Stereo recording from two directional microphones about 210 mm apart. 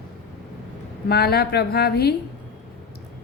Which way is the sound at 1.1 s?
50° left (ahead or behind).